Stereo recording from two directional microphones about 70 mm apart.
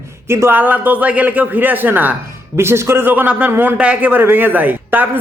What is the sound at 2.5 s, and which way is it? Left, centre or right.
A man's voice, right.